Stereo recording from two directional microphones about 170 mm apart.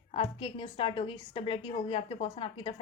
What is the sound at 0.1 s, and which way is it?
A woman's voice, 35° left (ahead or behind).